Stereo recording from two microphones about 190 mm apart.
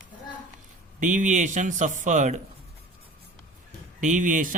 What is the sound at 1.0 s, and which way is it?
Speech, 40° right (ahead or behind).